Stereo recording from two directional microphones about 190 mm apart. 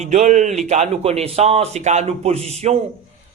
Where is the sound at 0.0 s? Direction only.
40° right (ahead or behind).